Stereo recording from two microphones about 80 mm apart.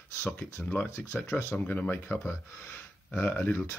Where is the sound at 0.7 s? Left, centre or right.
Left.